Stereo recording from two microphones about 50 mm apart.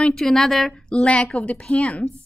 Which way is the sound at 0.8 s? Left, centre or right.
Centre.